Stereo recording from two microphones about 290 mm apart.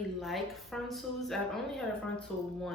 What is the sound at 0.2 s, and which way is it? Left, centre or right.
A woman's voice, centre.